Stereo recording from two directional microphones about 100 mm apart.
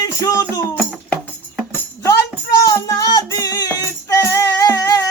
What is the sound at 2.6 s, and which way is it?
Music, 35° left (ahead or behind).